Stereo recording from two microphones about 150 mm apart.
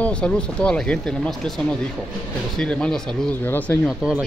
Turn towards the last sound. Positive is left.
turn(degrees=10)  # may be behind; listen again after turning